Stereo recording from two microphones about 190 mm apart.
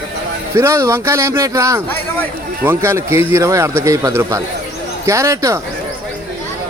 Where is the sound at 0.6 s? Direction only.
15° right (ahead or behind).